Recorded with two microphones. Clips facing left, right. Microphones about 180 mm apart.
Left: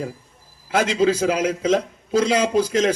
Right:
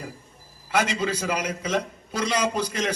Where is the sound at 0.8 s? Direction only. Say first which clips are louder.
Left 7 dB; 90° left.